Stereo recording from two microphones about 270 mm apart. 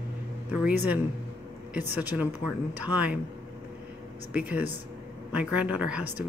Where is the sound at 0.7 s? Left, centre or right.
Centre.